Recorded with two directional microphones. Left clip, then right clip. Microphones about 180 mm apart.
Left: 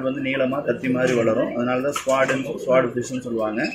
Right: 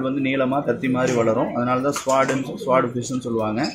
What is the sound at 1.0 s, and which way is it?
Speech, 45° right (ahead or behind).